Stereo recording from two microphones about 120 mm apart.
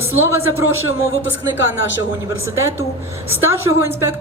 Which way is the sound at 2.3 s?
20° right (ahead or behind).